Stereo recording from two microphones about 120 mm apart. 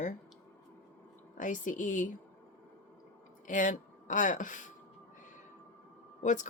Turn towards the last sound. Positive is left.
turn(degrees=90)